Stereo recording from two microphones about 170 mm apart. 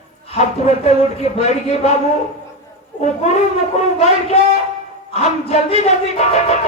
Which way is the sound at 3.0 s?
40° left (ahead or behind).